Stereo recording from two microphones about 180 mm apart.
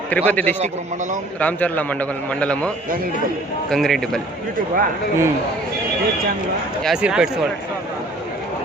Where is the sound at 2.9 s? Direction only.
55° right (ahead or behind).